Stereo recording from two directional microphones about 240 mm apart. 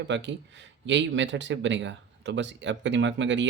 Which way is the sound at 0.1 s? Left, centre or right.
Right.